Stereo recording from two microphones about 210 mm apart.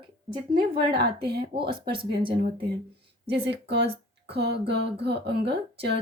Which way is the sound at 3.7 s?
55° right (ahead or behind).